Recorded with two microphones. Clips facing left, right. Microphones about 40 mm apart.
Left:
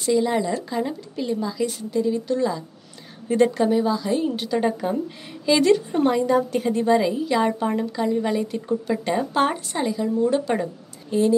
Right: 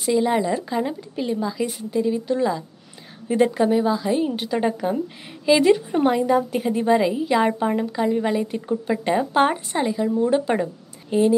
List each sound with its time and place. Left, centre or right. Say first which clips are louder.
0.0 s a woman's voice: right 1 dB; centre